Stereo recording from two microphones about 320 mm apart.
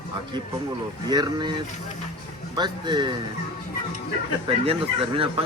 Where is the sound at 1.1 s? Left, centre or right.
Centre.